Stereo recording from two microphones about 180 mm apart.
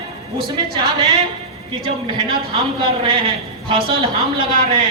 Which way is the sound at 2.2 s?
30° right (ahead or behind).